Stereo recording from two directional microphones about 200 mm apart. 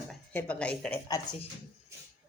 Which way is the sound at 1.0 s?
20° left (ahead or behind).